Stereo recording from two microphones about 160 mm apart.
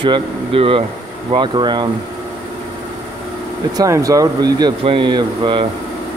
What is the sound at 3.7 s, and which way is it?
Speech, 20° right (ahead or behind).